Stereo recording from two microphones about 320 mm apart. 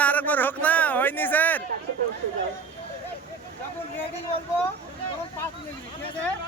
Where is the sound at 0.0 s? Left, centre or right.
Centre.